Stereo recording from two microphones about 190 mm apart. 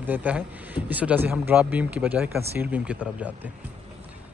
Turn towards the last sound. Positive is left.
turn(degrees=-5)  # may be behind; listen again after turning